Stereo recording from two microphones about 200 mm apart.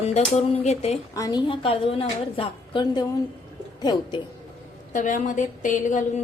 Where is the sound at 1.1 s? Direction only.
20° left (ahead or behind).